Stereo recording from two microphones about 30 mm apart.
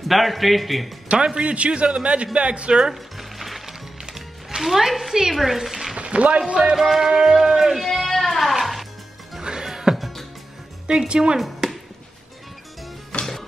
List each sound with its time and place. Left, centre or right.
0.1 s a man's voice: centre
1.1 s speech: right
1.5 s a man's voice: right
2.9 s music: centre
4.6 s a man's voice: centre
5.9 s speech: right
6.7 s speech: centre
7.7 s music: centre
9.4 s music: right
9.9 s music: centre
10.9 s speech: right
11.3 s chop: centre
13.2 s music: centre